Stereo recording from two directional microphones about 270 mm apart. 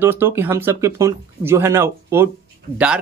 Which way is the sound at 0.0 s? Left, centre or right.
Centre.